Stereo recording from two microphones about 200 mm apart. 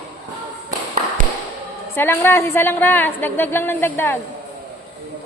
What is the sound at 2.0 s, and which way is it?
A woman's voice, 10° left (ahead or behind).